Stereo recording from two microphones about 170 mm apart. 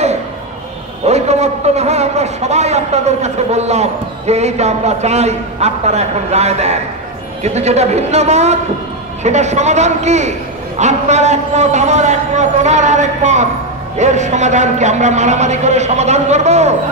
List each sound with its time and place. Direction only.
1.0 s a man's voice: 40° right (ahead or behind)